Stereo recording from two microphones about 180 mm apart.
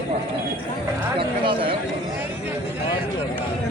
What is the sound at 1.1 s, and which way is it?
Speech, 30° right (ahead or behind).